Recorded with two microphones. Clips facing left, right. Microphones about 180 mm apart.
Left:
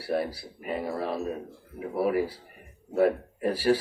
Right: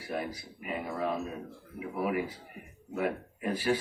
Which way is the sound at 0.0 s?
35° left (ahead or behind).